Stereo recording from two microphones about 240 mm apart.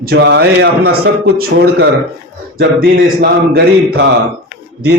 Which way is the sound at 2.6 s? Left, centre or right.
Right.